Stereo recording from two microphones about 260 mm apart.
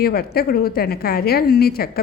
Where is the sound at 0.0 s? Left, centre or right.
Left.